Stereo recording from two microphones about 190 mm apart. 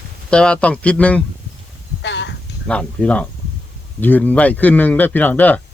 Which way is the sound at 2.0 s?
70° left (ahead or behind).